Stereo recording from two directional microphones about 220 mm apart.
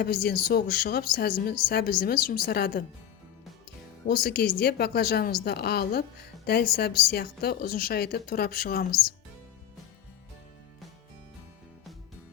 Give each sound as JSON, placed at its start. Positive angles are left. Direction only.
{"t": 0.0, "sound": "a woman's voice", "side_deg": 45}
{"t": 4.0, "sound": "a woman's voice", "side_deg": 45}